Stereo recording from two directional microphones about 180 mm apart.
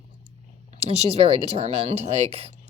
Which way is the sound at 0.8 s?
35° right (ahead or behind).